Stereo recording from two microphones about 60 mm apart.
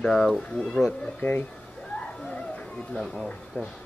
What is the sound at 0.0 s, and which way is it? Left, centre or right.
Speech, centre.